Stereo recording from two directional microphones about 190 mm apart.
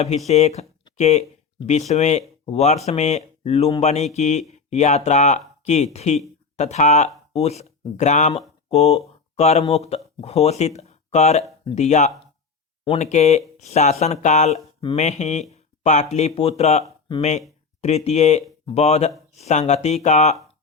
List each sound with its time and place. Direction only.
0.3 s speech: 35° left (ahead or behind)